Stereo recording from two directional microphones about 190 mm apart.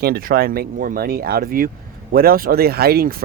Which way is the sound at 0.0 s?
50° right (ahead or behind).